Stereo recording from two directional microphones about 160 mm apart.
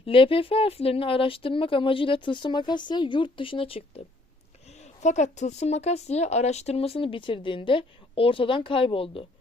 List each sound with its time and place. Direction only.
0.0 s speech: 35° left (ahead or behind)
5.0 s speech: 45° left (ahead or behind)